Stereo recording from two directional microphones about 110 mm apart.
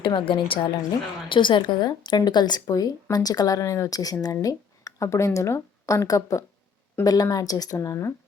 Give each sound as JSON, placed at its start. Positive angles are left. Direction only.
{"t": 0.0, "sound": "a woman's voice", "side_deg": 50}